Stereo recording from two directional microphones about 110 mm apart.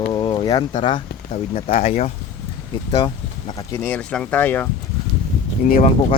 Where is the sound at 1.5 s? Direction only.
70° left (ahead or behind).